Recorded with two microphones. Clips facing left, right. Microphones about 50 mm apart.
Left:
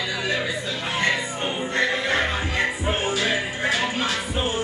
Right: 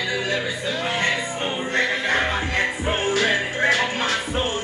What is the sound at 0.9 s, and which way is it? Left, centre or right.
Music, right.